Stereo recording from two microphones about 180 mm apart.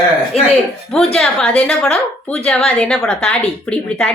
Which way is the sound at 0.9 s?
5° left (ahead or behind).